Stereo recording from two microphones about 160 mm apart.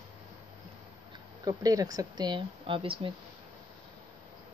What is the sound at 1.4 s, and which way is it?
Speech, 25° right (ahead or behind).